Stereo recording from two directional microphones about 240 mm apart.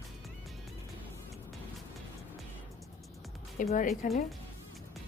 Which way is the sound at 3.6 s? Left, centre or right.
Left.